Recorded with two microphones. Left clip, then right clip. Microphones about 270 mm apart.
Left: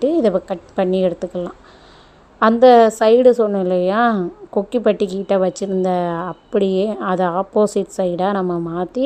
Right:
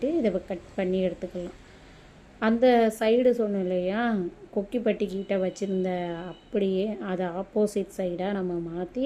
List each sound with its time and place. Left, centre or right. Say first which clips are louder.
0.0 s a woman's voice: left 10 dB; left